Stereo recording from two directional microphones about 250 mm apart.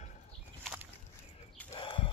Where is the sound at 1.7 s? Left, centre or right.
Left.